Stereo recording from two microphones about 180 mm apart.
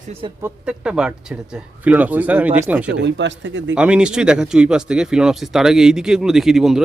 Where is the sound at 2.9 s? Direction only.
80° right.